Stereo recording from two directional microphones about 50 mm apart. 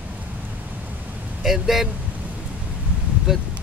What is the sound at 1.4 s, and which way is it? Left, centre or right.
Speech, centre.